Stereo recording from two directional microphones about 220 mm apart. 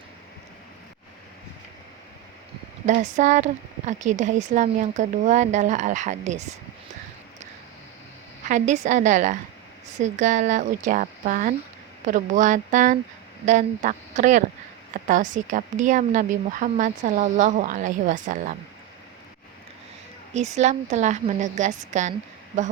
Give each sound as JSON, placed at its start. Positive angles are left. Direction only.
{"t": 2.8, "sound": "speech", "side_deg": -35}
{"t": 8.4, "sound": "speech", "side_deg": -35}
{"t": 20.3, "sound": "speech", "side_deg": -30}